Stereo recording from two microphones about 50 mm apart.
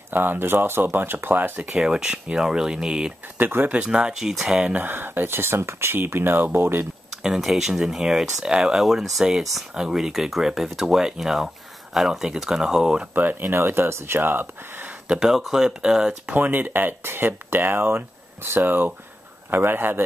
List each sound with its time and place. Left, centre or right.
0.1 s speech: right
1.6 s speech: centre
3.3 s speech: right
3.8 s speech: centre
4.7 s speech: right
7.2 s speech: centre
13.1 s speech: right
15.1 s speech: centre
16.3 s speech: right